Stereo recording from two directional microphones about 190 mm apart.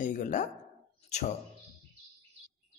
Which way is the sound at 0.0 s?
40° left (ahead or behind).